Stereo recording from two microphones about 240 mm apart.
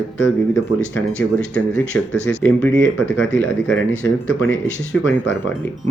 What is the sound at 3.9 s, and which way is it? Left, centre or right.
Speech, left.